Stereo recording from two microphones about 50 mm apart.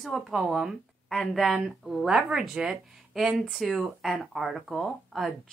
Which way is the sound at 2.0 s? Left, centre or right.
Centre.